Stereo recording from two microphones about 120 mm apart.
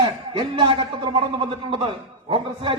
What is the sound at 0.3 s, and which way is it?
A man's voice, 45° right (ahead or behind).